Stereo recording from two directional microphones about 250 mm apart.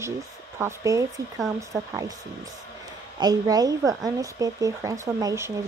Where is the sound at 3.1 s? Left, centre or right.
Centre.